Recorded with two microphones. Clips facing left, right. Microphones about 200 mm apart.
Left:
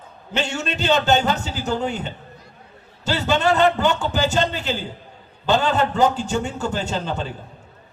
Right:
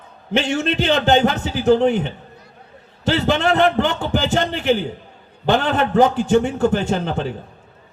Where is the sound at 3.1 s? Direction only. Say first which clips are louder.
Right 2 dB; 55° right (ahead or behind).